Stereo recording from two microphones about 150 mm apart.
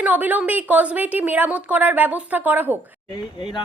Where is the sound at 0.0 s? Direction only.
10° right (ahead or behind).